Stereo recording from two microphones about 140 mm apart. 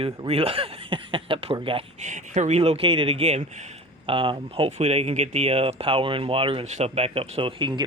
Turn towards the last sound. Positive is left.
turn(degrees=-35)  # may be behind; listen again after turning